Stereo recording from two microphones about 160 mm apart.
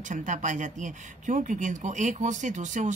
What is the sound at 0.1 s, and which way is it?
Speech, 50° right (ahead or behind).